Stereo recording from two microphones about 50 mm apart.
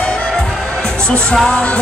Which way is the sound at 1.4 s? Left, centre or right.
Left.